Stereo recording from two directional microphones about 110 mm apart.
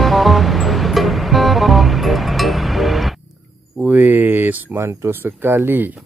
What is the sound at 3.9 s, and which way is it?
Speech, 15° right (ahead or behind).